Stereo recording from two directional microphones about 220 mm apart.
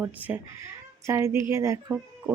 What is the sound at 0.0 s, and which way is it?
Speech, 10° right (ahead or behind).